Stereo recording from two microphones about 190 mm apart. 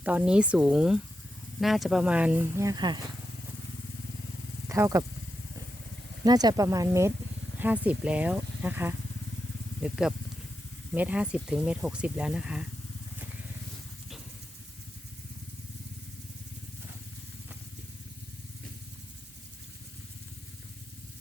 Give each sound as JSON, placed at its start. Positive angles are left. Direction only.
{"t": 0.0, "sound": "speech", "side_deg": -5}
{"t": 4.7, "sound": "speech", "side_deg": -15}
{"t": 6.2, "sound": "speech", "side_deg": -20}